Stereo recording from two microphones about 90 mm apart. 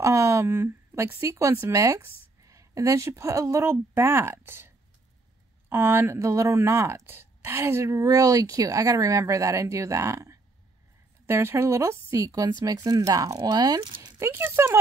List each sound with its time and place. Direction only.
0.0 s a woman's voice: 35° right (ahead or behind)
14.2 s speech: 25° right (ahead or behind)